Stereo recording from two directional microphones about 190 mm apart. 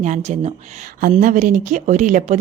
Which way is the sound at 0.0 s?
40° right (ahead or behind).